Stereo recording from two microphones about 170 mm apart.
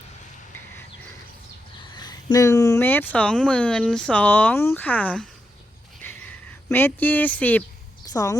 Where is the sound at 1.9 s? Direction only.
25° left (ahead or behind).